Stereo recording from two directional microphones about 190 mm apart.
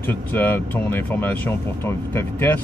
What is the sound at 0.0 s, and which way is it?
Speech, 10° left (ahead or behind).